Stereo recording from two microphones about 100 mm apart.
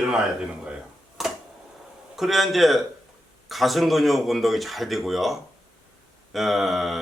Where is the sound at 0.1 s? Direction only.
10° right (ahead or behind).